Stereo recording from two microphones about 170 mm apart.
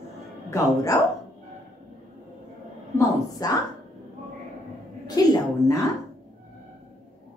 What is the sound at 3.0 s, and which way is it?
Speech, 20° left (ahead or behind).